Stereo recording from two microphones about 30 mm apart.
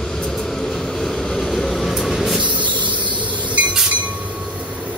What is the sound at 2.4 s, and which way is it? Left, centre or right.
Train, right.